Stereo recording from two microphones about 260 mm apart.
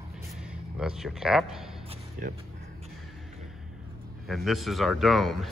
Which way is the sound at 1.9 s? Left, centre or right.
Right.